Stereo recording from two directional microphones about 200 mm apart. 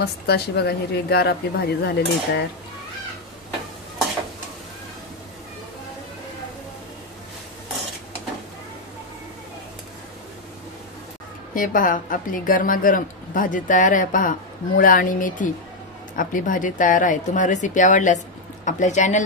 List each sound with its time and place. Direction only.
0.0 s a woman's voice: 55° left (ahead or behind)
11.5 s a woman's voice: 40° left (ahead or behind)